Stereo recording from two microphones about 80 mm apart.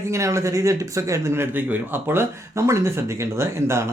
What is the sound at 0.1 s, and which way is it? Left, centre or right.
Speech, right.